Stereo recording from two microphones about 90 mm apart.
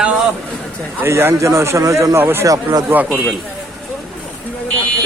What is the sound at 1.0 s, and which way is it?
A man's voice, 30° right (ahead or behind).